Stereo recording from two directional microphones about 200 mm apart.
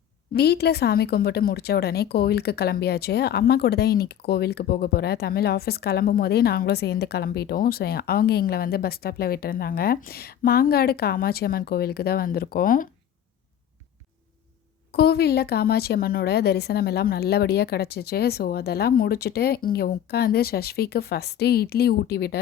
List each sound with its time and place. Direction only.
0.3 s a woman's voice: 50° left (ahead or behind)
14.9 s a woman's voice: 50° left (ahead or behind)